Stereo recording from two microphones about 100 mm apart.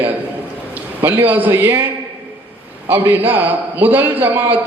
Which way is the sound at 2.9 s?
20° right (ahead or behind).